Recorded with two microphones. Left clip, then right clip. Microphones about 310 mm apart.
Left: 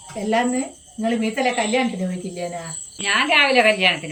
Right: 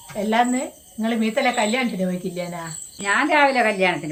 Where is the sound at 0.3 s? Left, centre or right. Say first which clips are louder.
Right 1 dB; centre.